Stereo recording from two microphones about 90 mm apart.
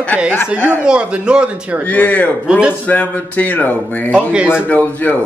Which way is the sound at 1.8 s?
15° left (ahead or behind).